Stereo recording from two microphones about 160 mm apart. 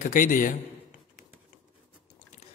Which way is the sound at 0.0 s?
55° left (ahead or behind).